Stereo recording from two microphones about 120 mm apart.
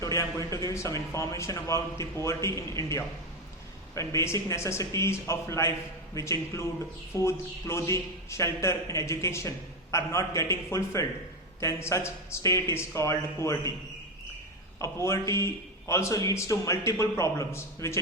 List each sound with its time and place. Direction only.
0.0 s a man's voice: 25° left (ahead or behind)
14.8 s a man's voice: 25° left (ahead or behind)